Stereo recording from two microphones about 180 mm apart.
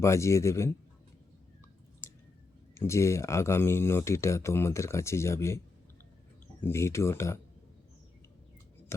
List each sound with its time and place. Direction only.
0.0 s speech: 15° left (ahead or behind)
2.7 s speech: 15° left (ahead or behind)
6.6 s speech: 15° left (ahead or behind)